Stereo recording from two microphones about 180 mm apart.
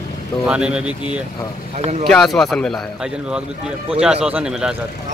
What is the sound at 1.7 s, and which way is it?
Speech, 30° right (ahead or behind).